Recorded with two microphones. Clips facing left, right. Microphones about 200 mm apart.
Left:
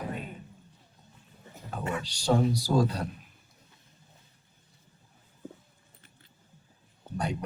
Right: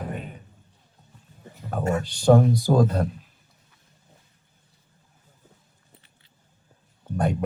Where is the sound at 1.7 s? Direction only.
45° right (ahead or behind).